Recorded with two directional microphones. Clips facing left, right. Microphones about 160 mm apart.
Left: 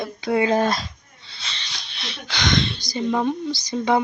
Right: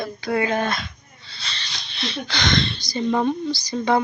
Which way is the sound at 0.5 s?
35° left (ahead or behind).